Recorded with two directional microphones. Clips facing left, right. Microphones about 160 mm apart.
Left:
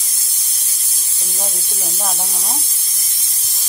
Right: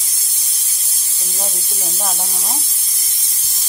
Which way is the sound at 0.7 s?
Centre (ahead or behind).